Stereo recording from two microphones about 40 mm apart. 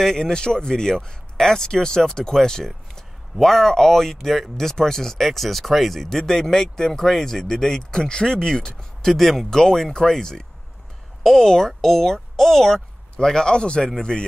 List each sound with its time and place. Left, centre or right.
0.0 s speech: centre